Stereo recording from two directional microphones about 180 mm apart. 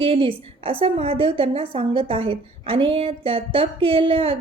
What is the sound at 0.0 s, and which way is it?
A woman's voice, 30° right (ahead or behind).